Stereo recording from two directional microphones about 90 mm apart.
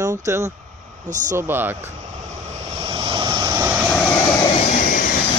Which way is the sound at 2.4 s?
90° right.